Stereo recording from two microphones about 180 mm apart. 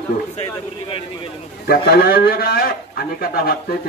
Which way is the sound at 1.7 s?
60° left (ahead or behind).